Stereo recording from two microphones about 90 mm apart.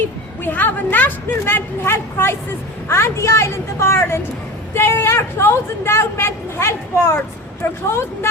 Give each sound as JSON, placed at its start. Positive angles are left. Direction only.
{"t": 0.4, "sound": "speech", "side_deg": 20}